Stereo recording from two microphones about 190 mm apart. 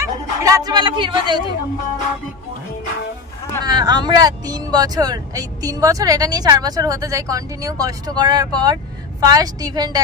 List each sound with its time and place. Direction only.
0.0 s speech: 15° right (ahead or behind)
3.6 s speech: 20° right (ahead or behind)